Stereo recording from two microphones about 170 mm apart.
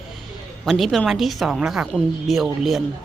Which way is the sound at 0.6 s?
Centre (ahead or behind).